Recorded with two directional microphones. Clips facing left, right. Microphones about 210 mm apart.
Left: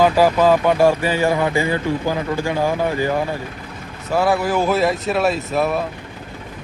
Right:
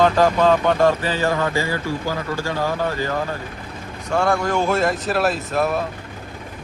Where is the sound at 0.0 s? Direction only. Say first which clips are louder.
Left 2 dB; 10° left (ahead or behind).